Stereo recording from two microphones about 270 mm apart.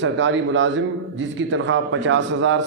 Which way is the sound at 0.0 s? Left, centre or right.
Right.